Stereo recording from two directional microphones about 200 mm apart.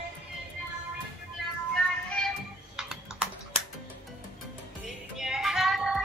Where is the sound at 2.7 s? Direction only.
5° right (ahead or behind).